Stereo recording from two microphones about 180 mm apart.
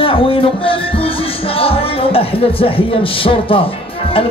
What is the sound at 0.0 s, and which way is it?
Music, 30° left (ahead or behind).